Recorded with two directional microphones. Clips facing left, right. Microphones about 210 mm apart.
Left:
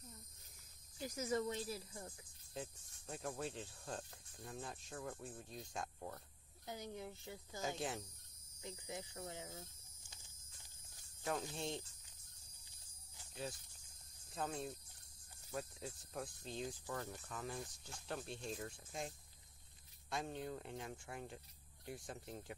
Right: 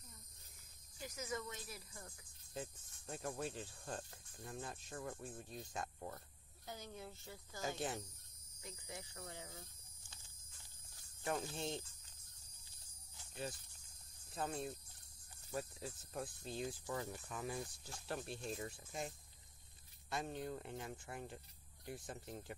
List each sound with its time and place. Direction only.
1.1 s speech: 30° left (ahead or behind)
2.5 s speech: centre (ahead or behind)
6.6 s speech: 15° left (ahead or behind)
7.6 s speech: centre (ahead or behind)
8.6 s speech: 20° left (ahead or behind)
11.2 s speech: centre (ahead or behind)
13.3 s speech: centre (ahead or behind)